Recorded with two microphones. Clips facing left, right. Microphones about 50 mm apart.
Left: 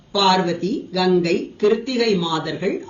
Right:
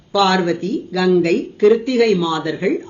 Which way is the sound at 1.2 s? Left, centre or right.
Right.